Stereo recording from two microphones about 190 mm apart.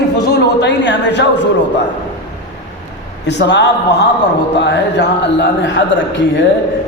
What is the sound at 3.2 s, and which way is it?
A man's voice, 65° left (ahead or behind).